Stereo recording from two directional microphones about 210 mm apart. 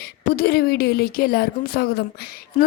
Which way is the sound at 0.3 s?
50° left (ahead or behind).